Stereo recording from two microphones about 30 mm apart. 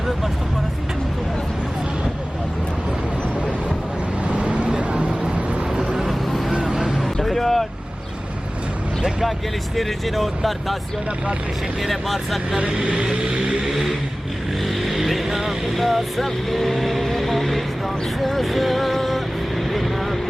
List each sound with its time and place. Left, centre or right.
4.4 s vehicle: right
6.0 s vehicle: centre
6.5 s vehicle: right
7.0 s vehicle: centre
9.7 s speech: centre
11.8 s speech: centre
12.5 s speech: right
14.6 s vehicle: centre
15.4 s speech: centre
16.2 s vehicle: centre